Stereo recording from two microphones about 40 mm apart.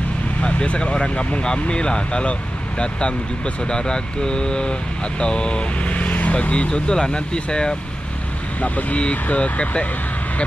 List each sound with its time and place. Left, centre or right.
0.4 s speech: left
5.9 s vehicle: left
6.3 s speech: left
8.5 s speech: left